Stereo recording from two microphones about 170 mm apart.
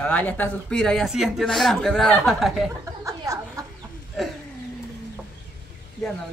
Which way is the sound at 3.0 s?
20° right (ahead or behind).